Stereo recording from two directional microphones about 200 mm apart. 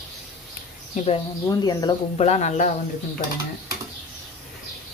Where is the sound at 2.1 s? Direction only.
35° left (ahead or behind).